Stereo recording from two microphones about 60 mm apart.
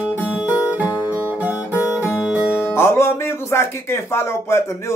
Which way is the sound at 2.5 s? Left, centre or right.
Left.